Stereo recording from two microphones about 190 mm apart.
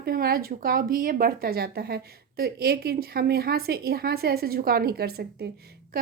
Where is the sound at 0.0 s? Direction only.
55° right (ahead or behind).